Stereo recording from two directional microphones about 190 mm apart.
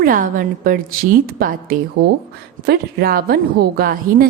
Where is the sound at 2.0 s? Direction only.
60° right (ahead or behind).